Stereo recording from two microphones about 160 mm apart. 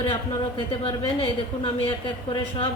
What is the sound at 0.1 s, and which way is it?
A woman's voice, 35° left (ahead or behind).